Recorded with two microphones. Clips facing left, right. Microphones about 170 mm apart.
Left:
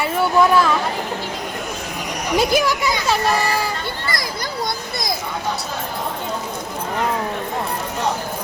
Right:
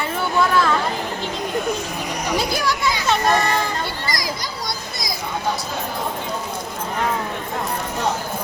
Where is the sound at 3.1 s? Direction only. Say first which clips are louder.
Right 1 dB; 5° left (ahead or behind).